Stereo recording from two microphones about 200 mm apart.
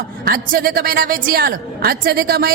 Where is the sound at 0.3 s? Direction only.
45° right (ahead or behind).